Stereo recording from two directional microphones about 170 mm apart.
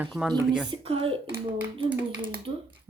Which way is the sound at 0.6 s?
35° right (ahead or behind).